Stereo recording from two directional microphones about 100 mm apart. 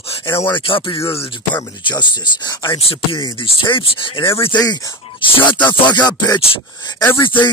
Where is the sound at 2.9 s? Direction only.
60° left (ahead or behind).